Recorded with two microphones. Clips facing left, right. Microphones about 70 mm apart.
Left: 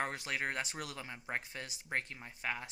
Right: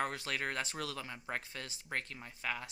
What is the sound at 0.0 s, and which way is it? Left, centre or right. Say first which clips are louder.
Speech: even; left.